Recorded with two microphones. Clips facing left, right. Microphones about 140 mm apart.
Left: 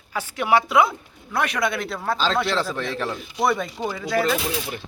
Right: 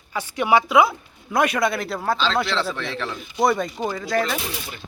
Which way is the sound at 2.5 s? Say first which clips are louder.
Left 1 dB; 45° left (ahead or behind).